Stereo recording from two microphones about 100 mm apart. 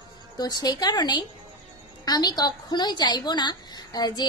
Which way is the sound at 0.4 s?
40° left (ahead or behind).